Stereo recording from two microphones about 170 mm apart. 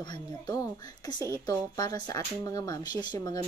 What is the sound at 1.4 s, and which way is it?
Speech, 20° left (ahead or behind).